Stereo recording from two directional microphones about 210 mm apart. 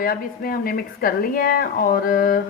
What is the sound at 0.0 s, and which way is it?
A woman's voice, 45° left (ahead or behind).